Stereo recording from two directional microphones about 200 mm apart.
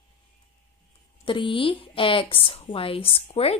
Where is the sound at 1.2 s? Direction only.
25° left (ahead or behind).